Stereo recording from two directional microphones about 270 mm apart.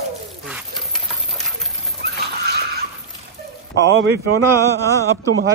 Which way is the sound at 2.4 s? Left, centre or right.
Right.